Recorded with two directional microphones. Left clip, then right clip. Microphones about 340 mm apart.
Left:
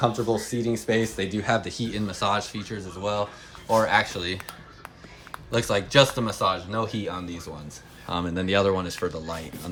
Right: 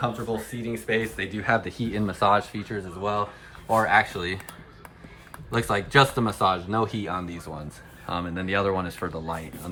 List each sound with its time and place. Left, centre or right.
0.0 s speech: centre
5.5 s speech: centre